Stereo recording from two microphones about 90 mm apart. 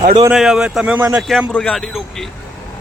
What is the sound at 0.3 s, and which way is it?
Speech, 5° right (ahead or behind).